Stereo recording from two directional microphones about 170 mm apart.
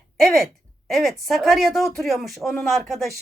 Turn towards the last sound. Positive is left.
turn(degrees=0)  # may be behind; listen again after turning